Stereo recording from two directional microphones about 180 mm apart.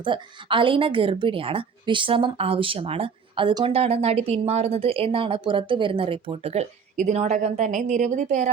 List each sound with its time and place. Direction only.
0.0 s a woman's voice: 30° right (ahead or behind)